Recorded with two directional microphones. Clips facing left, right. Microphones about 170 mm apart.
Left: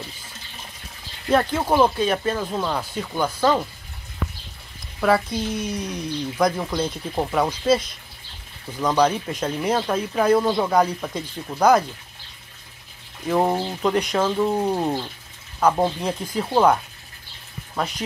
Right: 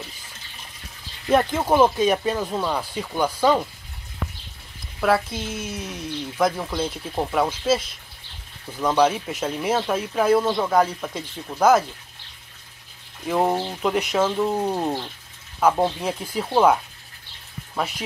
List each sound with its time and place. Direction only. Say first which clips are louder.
1.3 s speech: right 1 dB; 10° right (ahead or behind)
2.0 s speech: right 1 dB; 15° right (ahead or behind)
2.4 s speech: even; centre (ahead or behind)
5.0 s speech: left 1 dB; centre (ahead or behind)
13.3 s speech: left 1 dB; centre (ahead or behind)
15.6 s speech: even; 5° right (ahead or behind)